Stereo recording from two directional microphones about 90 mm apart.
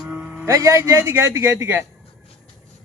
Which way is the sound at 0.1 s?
15° right (ahead or behind).